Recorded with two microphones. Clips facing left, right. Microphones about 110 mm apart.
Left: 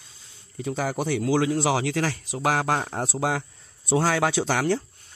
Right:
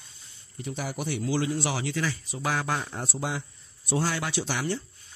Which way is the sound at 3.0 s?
90° left.